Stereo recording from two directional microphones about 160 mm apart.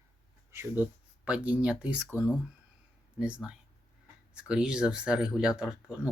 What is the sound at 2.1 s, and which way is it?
Speech, 15° left (ahead or behind).